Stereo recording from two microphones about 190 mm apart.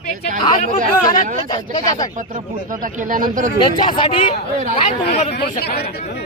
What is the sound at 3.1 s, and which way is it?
Speech, 45° right (ahead or behind).